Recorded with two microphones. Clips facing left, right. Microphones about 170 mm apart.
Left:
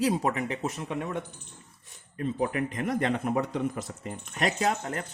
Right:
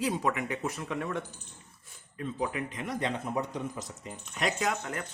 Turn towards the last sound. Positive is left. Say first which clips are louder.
# left 3 dB
turn(degrees=40)  # may be behind; listen again after turning